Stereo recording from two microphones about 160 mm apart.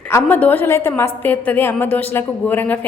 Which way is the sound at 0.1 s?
10° left (ahead or behind).